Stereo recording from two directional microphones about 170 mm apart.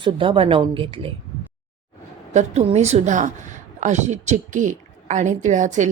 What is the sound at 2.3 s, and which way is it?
Speech, 40° right (ahead or behind).